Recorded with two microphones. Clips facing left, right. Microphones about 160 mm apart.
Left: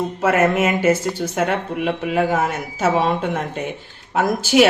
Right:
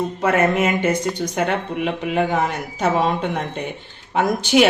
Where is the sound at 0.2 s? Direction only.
5° left (ahead or behind).